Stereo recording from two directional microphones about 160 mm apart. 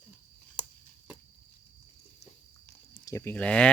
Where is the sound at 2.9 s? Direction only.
20° left (ahead or behind).